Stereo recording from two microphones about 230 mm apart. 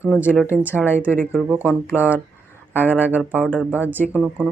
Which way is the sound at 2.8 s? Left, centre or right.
Centre.